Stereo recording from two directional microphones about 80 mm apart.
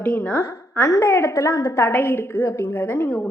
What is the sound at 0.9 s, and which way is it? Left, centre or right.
A woman's voice, left.